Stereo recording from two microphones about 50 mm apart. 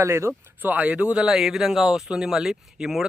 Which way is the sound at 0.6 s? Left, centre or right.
Right.